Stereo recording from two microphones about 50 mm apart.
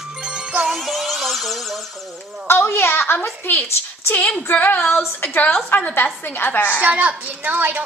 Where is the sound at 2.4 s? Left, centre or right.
Left.